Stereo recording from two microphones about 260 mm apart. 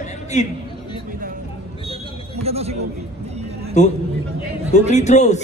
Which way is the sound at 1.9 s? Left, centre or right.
Right.